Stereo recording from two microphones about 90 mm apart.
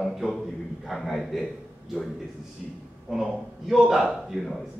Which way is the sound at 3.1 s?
5° right (ahead or behind).